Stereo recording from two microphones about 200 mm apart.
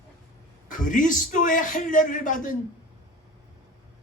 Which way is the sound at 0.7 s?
40° left (ahead or behind).